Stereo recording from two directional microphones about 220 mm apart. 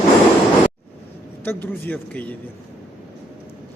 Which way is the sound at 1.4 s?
10° left (ahead or behind).